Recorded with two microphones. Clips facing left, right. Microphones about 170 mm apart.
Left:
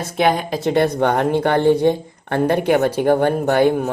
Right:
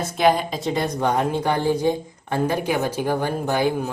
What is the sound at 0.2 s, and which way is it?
Speech, 60° left (ahead or behind).